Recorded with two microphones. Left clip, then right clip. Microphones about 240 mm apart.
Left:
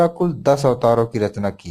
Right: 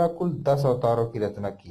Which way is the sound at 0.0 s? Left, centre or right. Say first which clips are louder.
Left 7 dB; left.